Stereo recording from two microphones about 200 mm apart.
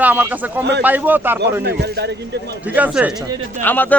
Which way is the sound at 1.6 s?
55° right (ahead or behind).